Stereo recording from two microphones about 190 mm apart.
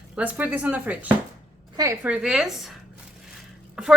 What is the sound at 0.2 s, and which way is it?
Speech, 10° right (ahead or behind).